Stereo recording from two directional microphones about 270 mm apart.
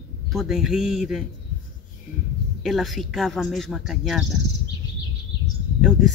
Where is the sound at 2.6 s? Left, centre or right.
Centre.